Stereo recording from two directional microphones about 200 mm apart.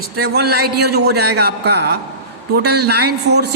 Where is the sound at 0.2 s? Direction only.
55° right (ahead or behind).